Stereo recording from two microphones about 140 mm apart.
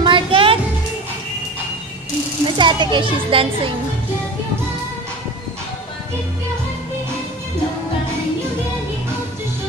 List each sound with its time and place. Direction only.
0.0 s music: 40° right (ahead or behind)
2.5 s a child's voice: 35° right (ahead or behind)